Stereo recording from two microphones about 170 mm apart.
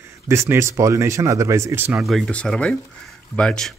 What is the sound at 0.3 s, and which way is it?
Speech, 15° right (ahead or behind).